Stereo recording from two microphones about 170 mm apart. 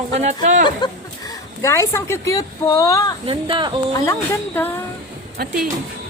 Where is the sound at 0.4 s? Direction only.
45° right (ahead or behind).